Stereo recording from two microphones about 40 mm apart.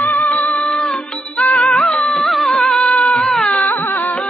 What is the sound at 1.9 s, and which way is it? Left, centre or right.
Music, centre.